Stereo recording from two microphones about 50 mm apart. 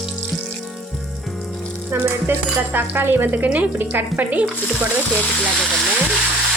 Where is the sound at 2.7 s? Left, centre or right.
Right.